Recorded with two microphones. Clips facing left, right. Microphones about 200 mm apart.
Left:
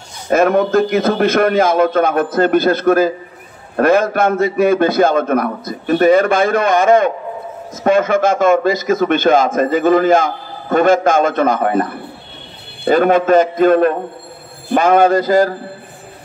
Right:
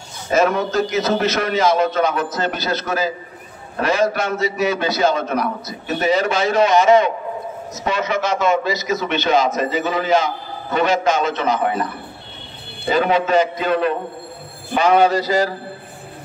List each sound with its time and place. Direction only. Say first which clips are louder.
0.3 s a man's voice: left 5 dB; 55° left (ahead or behind)